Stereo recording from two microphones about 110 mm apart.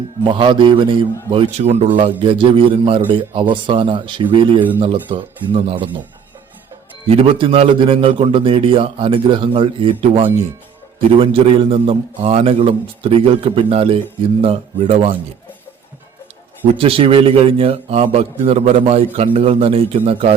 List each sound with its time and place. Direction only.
0.3 s a man's voice: 50° right (ahead or behind)
1.5 s a man's voice: 75° right (ahead or behind); by 6.0 s 50° right (ahead or behind)
7.1 s a man's voice: 55° right (ahead or behind)
16.7 s a man's voice: 55° right (ahead or behind)